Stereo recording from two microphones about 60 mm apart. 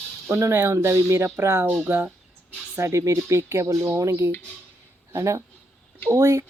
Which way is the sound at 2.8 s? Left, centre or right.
Right.